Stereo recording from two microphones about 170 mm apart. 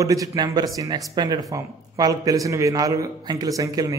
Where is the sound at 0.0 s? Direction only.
20° right (ahead or behind).